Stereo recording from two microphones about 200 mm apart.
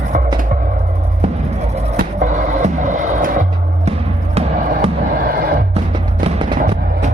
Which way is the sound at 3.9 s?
30° right (ahead or behind).